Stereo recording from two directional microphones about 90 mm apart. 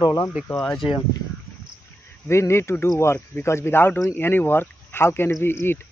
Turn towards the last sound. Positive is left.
turn(degrees=25)  # may be behind; listen again after turning